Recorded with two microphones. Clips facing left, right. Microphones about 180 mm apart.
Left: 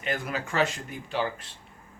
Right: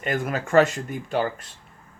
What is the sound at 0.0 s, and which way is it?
Speech, 50° right (ahead or behind).